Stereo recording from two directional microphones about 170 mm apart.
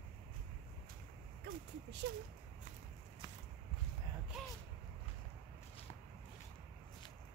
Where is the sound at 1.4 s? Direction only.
60° right (ahead or behind).